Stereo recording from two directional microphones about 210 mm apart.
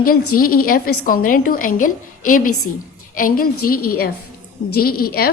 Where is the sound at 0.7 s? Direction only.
45° left (ahead or behind).